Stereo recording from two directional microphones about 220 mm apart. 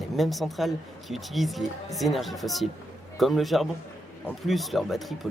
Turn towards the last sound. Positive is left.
turn(degrees=0)  # may be behind; listen again after turning